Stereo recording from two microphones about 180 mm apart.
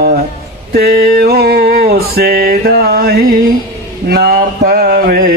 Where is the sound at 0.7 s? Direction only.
60° right (ahead or behind).